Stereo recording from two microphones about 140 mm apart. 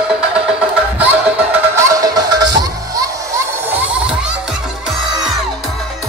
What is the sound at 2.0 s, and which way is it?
Music, 30° right (ahead or behind).